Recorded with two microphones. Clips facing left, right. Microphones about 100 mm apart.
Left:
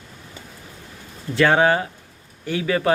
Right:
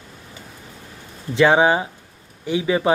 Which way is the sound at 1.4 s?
15° right (ahead or behind).